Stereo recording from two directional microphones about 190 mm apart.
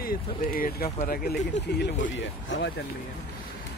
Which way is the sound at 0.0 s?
50° left (ahead or behind).